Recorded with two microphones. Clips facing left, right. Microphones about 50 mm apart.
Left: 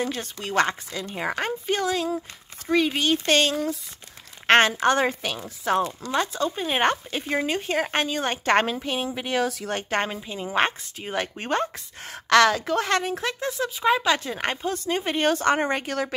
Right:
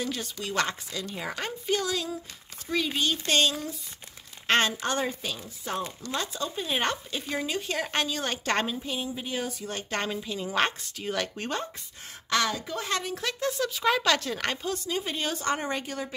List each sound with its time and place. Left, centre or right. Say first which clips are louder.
0.0 s speech: left 4 dB; left
8.6 s speech: left 5 dB; left
9.7 s speech: left 5 dB; left
10.1 s speech: left 3 dB; left
12.1 s speech: left 10 dB; left
13.0 s speech: left 3 dB; left
14.9 s speech: left 10 dB; left
15.9 s a woman's voice: left 7 dB; left